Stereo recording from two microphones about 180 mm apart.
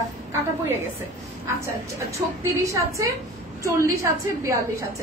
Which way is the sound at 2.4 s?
15° right (ahead or behind).